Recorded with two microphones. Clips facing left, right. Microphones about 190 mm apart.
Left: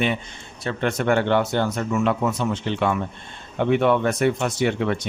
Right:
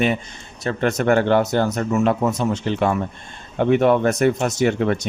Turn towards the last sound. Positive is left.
turn(degrees=-45)  # may be behind; listen again after turning